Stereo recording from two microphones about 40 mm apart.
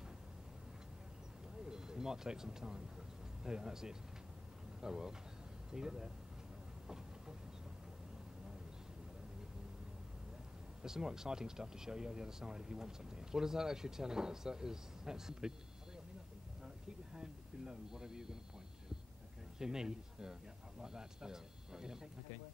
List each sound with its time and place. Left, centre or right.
1.6 s speech: centre
10.8 s speech: centre
16.6 s a sound: centre
19.6 s speech: centre